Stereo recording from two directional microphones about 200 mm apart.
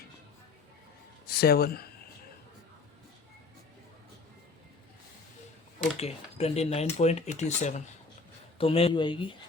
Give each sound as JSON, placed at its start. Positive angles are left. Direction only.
{"t": 1.3, "sound": "speech", "side_deg": 50}
{"t": 6.0, "sound": "speech", "side_deg": 30}